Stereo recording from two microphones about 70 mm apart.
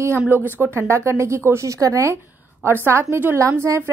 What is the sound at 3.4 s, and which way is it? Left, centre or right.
Speech, right.